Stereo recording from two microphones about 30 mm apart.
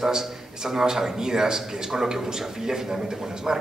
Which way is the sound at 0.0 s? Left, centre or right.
Centre.